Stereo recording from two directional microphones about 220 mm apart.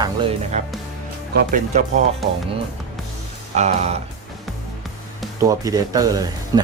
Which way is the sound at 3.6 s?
30° right (ahead or behind).